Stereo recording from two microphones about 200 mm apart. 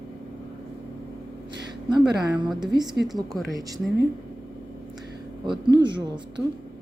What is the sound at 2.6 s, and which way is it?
Speech, 20° right (ahead or behind).